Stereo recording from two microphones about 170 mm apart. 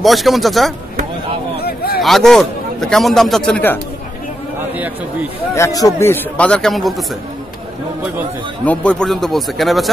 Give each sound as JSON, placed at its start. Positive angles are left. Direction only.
{"t": 0.0, "sound": "a man's voice", "side_deg": 0}
{"t": 1.6, "sound": "a sound", "side_deg": 65}
{"t": 2.0, "sound": "a man's voice", "side_deg": 0}
{"t": 5.5, "sound": "speech", "side_deg": 20}
{"t": 8.6, "sound": "a man's voice", "side_deg": 5}